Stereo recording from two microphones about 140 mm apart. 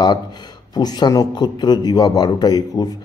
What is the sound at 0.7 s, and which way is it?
A man's voice, 30° left (ahead or behind).